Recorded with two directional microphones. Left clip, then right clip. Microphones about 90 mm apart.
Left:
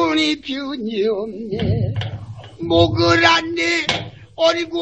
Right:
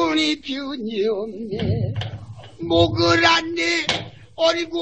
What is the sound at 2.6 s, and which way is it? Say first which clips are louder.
Speech: left 2 dB; 30° left (ahead or behind).